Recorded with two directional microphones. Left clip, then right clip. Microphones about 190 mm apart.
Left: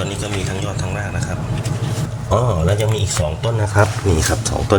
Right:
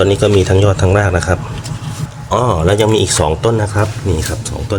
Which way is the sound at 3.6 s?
10° left (ahead or behind).